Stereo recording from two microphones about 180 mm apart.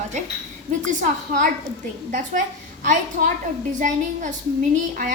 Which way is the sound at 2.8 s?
45° right (ahead or behind).